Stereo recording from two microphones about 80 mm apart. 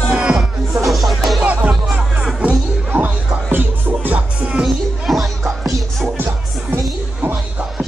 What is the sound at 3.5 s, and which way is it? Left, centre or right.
Music, right.